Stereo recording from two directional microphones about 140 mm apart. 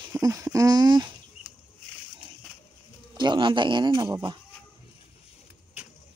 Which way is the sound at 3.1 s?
35° right (ahead or behind).